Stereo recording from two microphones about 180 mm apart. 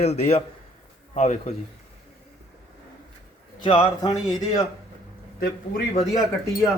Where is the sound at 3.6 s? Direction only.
25° left (ahead or behind).